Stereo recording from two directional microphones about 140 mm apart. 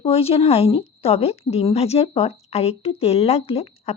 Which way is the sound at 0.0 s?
45° left (ahead or behind).